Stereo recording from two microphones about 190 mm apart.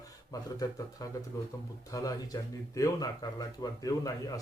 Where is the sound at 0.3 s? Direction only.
20° left (ahead or behind).